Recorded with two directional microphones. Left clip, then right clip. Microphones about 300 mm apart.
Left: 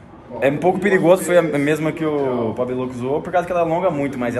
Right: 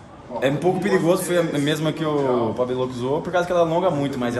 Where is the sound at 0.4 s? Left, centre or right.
Centre.